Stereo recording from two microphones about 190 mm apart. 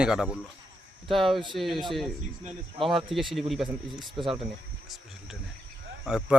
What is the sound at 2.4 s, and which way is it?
Speech, 30° right (ahead or behind).